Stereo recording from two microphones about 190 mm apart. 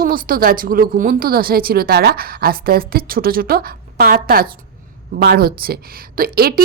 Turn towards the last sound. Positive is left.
turn(degrees=-50)  # may be behind; listen again after turning